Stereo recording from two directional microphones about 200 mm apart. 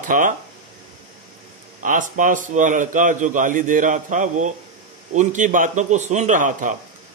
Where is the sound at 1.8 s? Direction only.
40° right (ahead or behind).